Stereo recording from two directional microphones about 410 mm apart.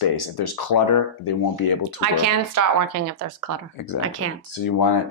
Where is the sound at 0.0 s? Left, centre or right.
Left.